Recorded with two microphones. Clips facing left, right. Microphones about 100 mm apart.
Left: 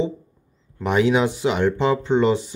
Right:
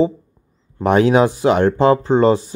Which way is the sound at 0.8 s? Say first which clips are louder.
Right 5 dB; 50° right (ahead or behind).